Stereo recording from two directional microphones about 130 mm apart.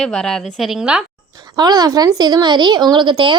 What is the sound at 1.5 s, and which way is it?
Speech, 30° right (ahead or behind).